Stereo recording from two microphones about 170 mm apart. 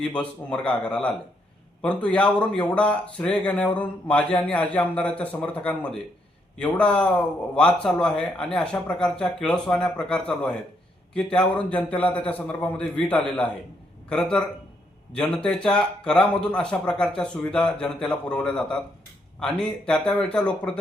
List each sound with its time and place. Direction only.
0.0 s a man's voice: 5° left (ahead or behind)